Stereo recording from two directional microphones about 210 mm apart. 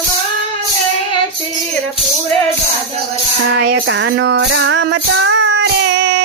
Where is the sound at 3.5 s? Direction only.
60° right (ahead or behind).